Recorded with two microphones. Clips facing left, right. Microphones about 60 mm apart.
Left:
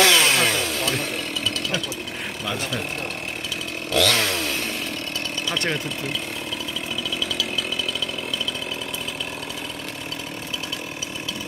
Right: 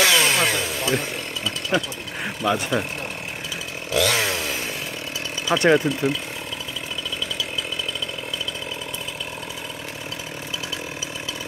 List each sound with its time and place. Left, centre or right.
0.0 s chainsaw: centre
2.4 s speech: centre
3.9 s chainsaw: centre
5.5 s speech: centre